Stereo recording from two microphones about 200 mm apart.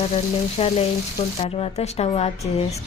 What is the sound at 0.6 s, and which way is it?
Speech, 30° left (ahead or behind).